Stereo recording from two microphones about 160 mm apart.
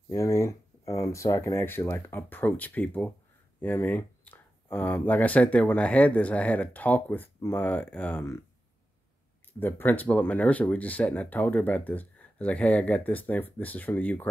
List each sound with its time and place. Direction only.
0.1 s speech: 15° left (ahead or behind)
9.5 s speech: 15° left (ahead or behind)